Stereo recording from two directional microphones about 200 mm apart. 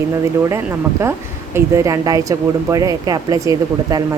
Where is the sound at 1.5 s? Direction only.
15° right (ahead or behind).